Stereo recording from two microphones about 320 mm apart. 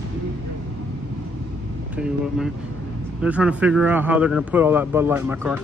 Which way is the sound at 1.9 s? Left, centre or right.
Centre.